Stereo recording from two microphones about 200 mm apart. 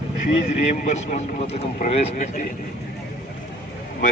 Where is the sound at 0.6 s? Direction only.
35° left (ahead or behind).